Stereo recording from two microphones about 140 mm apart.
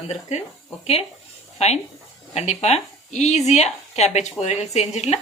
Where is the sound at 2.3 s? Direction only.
50° left (ahead or behind).